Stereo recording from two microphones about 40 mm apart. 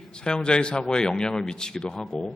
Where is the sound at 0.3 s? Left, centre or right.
Left.